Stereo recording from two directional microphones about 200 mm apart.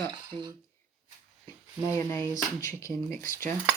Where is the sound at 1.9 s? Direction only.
15° left (ahead or behind).